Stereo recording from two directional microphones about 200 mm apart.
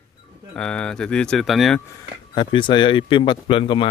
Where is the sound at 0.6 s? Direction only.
5° left (ahead or behind).